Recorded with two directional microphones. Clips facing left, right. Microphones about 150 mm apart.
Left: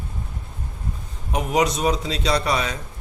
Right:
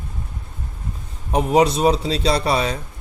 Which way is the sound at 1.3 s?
30° right (ahead or behind).